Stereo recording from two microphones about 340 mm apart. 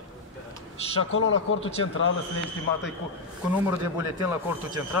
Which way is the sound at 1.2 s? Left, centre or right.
Left.